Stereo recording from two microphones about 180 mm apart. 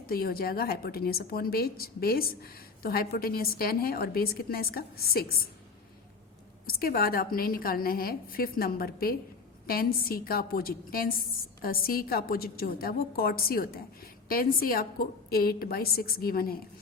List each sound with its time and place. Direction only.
0.1 s a woman's voice: 55° left (ahead or behind)
6.7 s a woman's voice: 55° left (ahead or behind)